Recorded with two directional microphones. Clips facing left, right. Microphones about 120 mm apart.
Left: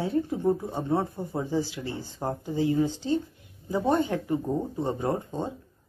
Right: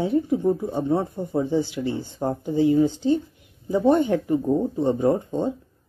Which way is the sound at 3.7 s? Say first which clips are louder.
Right 6 dB; 25° left (ahead or behind).